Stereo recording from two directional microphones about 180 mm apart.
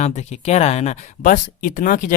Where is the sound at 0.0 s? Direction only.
40° left (ahead or behind).